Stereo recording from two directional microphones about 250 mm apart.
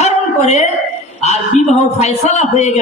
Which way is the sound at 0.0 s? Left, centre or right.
Left.